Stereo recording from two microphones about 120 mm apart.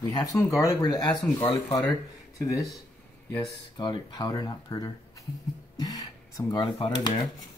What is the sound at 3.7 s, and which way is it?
Speech, 40° left (ahead or behind).